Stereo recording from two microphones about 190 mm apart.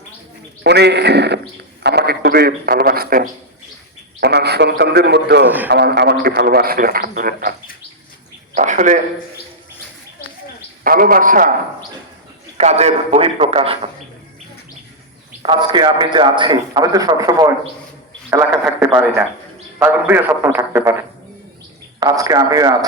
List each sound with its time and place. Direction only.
0.6 s a man's voice: 60° right (ahead or behind)
8.5 s a man's voice: 40° right (ahead or behind)
10.8 s a man's voice: 50° right (ahead or behind)
12.5 s a man's voice: 35° right (ahead or behind)
15.4 s a man's voice: 25° right (ahead or behind)
22.0 s a man's voice: 20° right (ahead or behind)